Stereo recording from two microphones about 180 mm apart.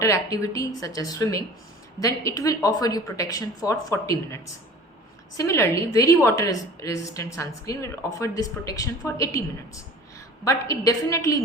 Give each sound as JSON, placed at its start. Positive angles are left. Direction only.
{"t": 0.0, "sound": "a woman's voice", "side_deg": 15}
{"t": 5.4, "sound": "a woman's voice", "side_deg": 15}